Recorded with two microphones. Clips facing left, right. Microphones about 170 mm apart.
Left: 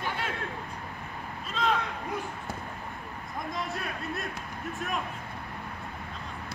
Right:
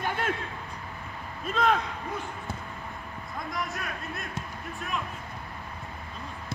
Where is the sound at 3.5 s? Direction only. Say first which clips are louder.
Even; 30° left (ahead or behind).